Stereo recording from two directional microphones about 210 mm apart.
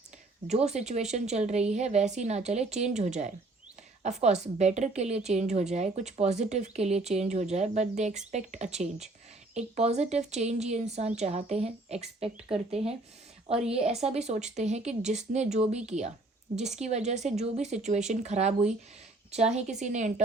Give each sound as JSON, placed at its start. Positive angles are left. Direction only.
{"t": 0.4, "sound": "a woman's voice", "side_deg": -30}